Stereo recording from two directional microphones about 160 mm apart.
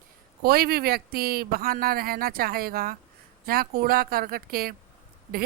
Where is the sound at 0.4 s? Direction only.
70° right (ahead or behind).